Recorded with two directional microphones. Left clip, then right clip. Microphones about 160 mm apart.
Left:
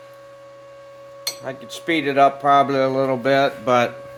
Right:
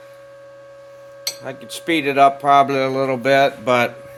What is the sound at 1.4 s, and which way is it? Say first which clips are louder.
Speech: right 1 dB; 35° right (ahead or behind).